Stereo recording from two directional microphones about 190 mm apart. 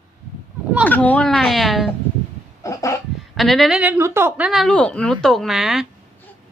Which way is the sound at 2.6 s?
15° left (ahead or behind).